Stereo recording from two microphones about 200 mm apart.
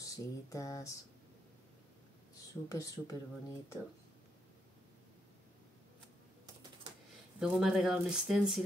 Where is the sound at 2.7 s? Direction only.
15° left (ahead or behind).